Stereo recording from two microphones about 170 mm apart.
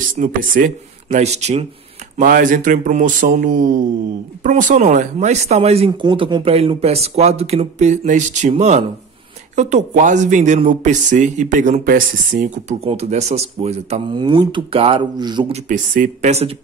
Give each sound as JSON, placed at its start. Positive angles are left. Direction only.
{"t": 0.2, "sound": "speech", "side_deg": -55}
{"t": 1.0, "sound": "speech", "side_deg": -40}
{"t": 2.1, "sound": "speech", "side_deg": -55}
{"t": 14.1, "sound": "speech", "side_deg": -25}
{"t": 15.5, "sound": "speech", "side_deg": -50}